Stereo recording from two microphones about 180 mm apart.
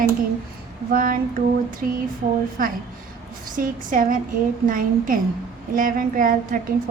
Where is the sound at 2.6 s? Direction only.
50° right (ahead or behind).